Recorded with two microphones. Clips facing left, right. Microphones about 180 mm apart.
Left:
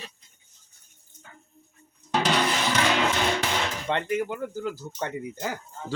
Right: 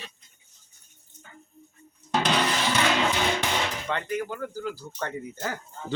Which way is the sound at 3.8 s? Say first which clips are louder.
Left 3 dB; 20° left (ahead or behind).